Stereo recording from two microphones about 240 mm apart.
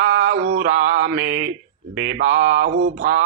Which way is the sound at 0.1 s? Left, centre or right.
Right.